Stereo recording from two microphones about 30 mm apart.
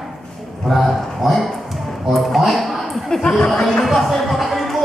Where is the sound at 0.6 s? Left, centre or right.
Centre.